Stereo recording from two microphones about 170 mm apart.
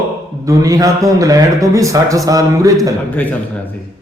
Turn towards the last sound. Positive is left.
turn(degrees=10)  # may be behind; listen again after turning